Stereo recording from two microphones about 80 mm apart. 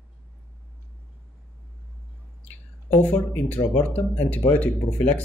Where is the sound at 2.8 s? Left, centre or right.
Centre.